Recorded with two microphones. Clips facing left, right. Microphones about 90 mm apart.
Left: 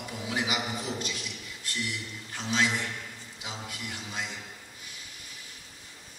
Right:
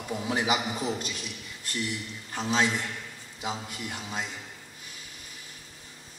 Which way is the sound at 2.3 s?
35° right (ahead or behind).